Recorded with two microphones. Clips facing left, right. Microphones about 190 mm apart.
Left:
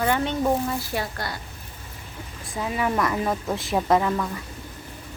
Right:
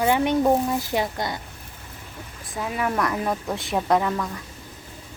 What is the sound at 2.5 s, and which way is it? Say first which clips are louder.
Speech: left 1 dB; centre (ahead or behind).